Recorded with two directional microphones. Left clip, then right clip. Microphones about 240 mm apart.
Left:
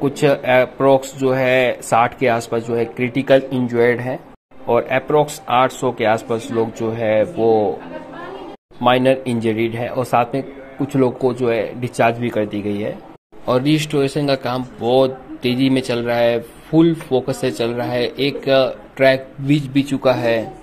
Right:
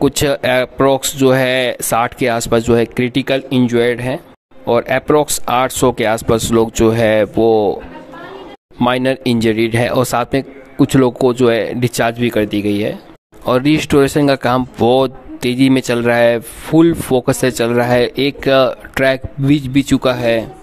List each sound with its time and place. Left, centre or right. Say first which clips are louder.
0.0 s speech: right 2 dB; right
8.8 s speech: even; right
13.5 s speech: right 4 dB; right